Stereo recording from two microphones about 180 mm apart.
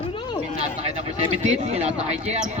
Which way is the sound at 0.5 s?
40° right (ahead or behind).